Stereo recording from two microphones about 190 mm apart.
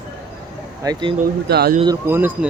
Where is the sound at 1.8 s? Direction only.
15° right (ahead or behind).